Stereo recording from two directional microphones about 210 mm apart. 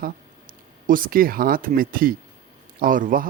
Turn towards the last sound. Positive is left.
turn(degrees=-40)  # may be behind; listen again after turning